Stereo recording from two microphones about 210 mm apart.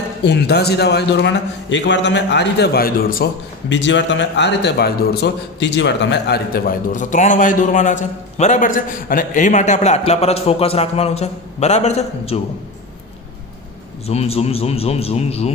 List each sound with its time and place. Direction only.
0.3 s a man's voice: 50° left (ahead or behind)
3.7 s a man's voice: 60° left (ahead or behind); by 12.4 s 30° left (ahead or behind)
14.1 s speech: 30° left (ahead or behind)